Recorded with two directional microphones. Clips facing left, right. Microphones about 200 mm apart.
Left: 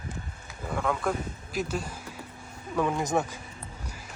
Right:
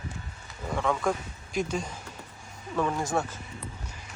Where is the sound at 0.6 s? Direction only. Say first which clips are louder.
Right 1 dB; 5° left (ahead or behind).